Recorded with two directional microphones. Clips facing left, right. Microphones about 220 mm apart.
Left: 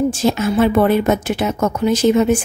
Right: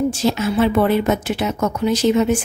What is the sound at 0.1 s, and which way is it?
Speech, 50° left (ahead or behind).